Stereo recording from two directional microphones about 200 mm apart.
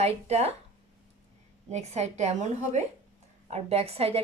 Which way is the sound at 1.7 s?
35° right (ahead or behind).